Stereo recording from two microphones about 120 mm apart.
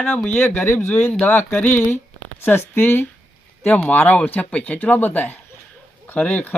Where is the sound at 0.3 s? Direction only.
15° left (ahead or behind).